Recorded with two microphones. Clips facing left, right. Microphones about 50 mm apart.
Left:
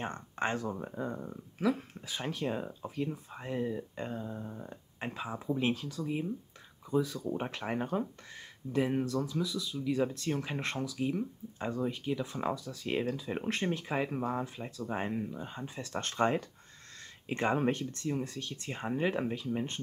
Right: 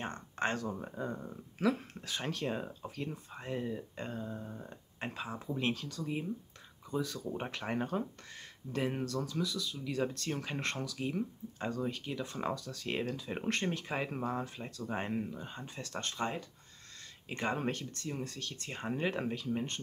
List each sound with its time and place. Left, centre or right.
0.0 s speech: centre
6.0 s speech: centre
11.0 s speech: centre
16.0 s speech: left
17.3 s speech: centre
18.5 s speech: centre